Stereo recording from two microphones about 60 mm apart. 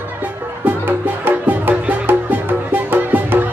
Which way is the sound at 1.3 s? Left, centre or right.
Right.